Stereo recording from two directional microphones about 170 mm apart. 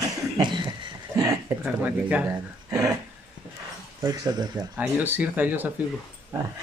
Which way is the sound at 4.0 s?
20° right (ahead or behind).